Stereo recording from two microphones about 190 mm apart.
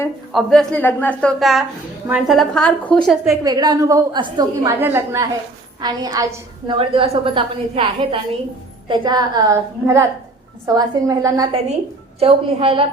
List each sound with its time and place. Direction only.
0.3 s a woman's voice: centre (ahead or behind)
3.4 s a woman's voice: 20° right (ahead or behind)
6.7 s a woman's voice: 30° right (ahead or behind)
12.2 s a woman's voice: 30° right (ahead or behind)